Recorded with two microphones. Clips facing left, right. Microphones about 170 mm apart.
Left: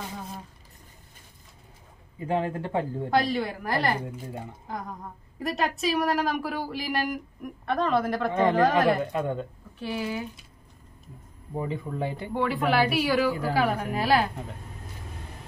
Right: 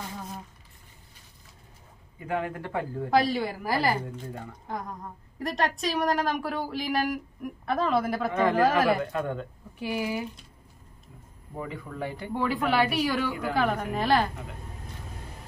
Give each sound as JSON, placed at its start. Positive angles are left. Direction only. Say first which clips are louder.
{"t": 2.1, "sound": "speech", "louder": "left 3 dB", "side_deg": 30}
{"t": 3.1, "sound": "speech", "louder": "right 2 dB", "side_deg": 0}
{"t": 4.0, "sound": "speech", "louder": "left 1 dB", "side_deg": 10}
{"t": 8.3, "sound": "speech", "louder": "left 2 dB", "side_deg": 25}
{"t": 8.5, "sound": "speech", "louder": "even", "side_deg": -5}
{"t": 9.0, "sound": "speech", "louder": "left 2 dB", "side_deg": 20}
{"t": 9.8, "sound": "speech", "louder": "right 1 dB", "side_deg": -10}
{"t": 11.5, "sound": "speech", "louder": "left 5 dB", "side_deg": 25}
{"t": 12.4, "sound": "speech", "louder": "left 1 dB", "side_deg": 0}